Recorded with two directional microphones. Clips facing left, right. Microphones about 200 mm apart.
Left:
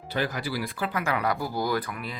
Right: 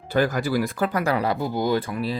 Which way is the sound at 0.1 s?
45° right (ahead or behind).